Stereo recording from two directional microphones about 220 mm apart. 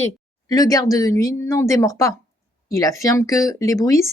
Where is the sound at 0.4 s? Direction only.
15° left (ahead or behind).